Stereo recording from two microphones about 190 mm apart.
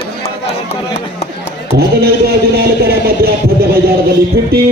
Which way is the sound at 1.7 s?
55° right (ahead or behind).